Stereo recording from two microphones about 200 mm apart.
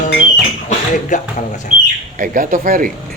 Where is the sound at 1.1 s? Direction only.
40° left (ahead or behind).